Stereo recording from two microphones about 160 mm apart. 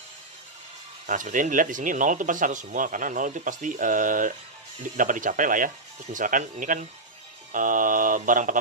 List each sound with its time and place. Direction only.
1.0 s speech: 55° right (ahead or behind)